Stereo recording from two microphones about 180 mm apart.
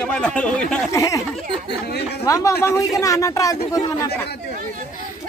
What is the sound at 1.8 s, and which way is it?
Speech, 65° left (ahead or behind).